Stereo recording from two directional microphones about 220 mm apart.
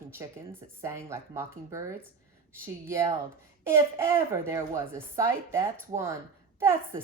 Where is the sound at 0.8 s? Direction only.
10° right (ahead or behind).